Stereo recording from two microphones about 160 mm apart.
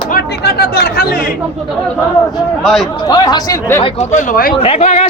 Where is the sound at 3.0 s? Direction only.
25° left (ahead or behind).